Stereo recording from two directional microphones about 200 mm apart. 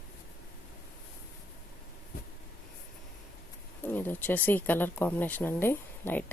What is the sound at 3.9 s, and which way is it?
Speech, 10° left (ahead or behind).